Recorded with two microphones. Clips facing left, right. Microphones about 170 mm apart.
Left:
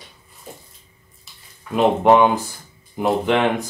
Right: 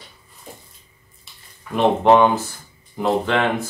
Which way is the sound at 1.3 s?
Centre (ahead or behind).